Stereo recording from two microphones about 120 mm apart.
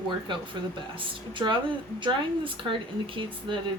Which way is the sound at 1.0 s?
45° right (ahead or behind).